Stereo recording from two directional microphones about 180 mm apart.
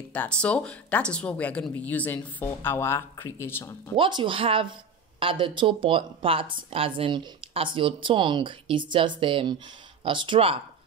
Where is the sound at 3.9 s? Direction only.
25° right (ahead or behind).